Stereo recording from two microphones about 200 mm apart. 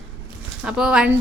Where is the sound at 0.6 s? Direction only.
5° right (ahead or behind).